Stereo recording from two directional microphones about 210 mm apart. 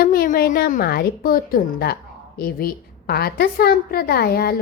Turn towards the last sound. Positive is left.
turn(degrees=45)  # may be behind; listen again after turning